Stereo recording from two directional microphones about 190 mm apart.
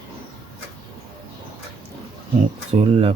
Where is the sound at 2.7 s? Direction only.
35° right (ahead or behind).